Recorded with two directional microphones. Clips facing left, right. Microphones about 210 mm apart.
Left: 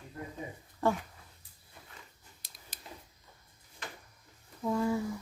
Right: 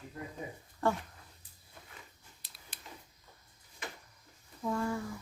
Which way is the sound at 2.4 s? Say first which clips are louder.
Left 1 dB; 45° left (ahead or behind).